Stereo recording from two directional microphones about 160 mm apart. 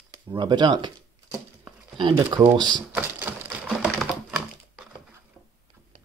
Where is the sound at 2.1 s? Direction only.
25° right (ahead or behind).